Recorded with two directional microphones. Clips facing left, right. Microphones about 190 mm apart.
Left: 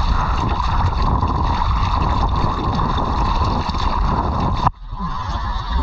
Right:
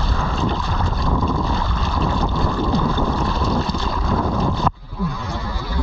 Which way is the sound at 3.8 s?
20° right (ahead or behind).